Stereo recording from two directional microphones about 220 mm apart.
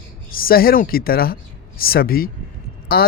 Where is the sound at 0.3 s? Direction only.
40° left (ahead or behind).